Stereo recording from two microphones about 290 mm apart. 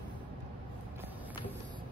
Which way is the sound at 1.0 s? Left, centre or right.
Centre.